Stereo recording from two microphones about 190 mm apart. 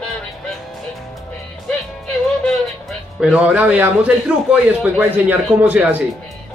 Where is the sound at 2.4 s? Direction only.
Centre (ahead or behind).